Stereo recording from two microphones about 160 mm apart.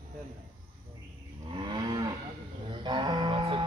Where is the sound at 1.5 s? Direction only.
30° right (ahead or behind).